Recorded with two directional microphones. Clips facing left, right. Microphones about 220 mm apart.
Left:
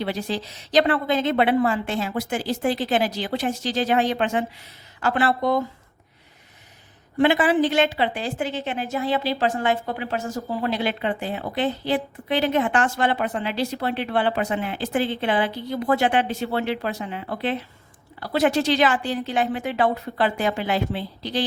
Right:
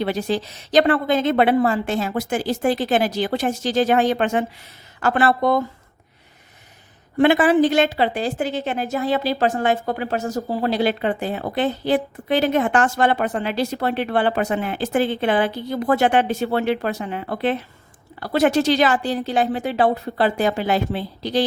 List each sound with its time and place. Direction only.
0.0 s a woman's voice: 50° right (ahead or behind)
7.2 s a woman's voice: 45° right (ahead or behind)